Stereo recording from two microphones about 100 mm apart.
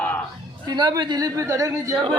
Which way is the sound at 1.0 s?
45° right (ahead or behind).